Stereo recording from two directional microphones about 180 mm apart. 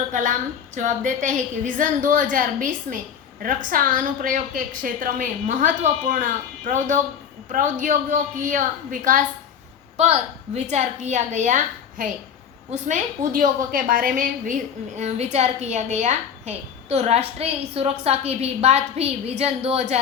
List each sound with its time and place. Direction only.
0.1 s a woman's voice: 45° right (ahead or behind)